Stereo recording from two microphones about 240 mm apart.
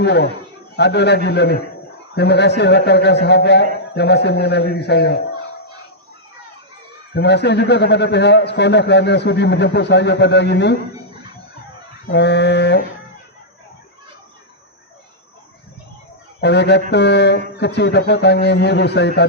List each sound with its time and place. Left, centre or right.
0.0 s a man's voice: left
7.1 s a man's voice: left
12.0 s a man's voice: left
16.4 s a man's voice: left